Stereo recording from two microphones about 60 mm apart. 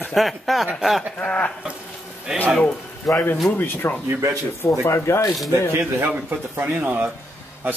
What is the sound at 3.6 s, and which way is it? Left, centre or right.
Speech, left.